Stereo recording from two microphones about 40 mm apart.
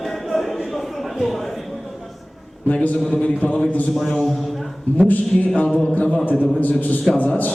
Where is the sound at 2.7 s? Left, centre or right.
Left.